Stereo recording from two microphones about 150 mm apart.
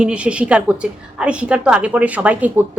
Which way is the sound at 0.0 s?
5° right (ahead or behind).